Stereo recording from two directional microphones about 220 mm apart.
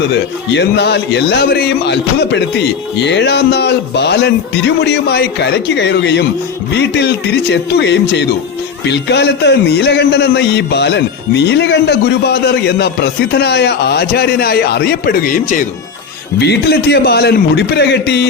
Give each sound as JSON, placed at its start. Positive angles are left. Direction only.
{"t": 0.1, "sound": "a man's voice", "side_deg": 50}
{"t": 16.4, "sound": "a man's voice", "side_deg": 50}